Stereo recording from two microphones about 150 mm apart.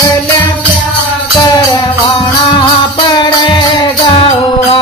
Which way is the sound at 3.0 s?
25° left (ahead or behind).